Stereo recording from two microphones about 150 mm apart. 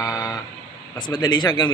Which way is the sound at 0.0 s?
20° left (ahead or behind).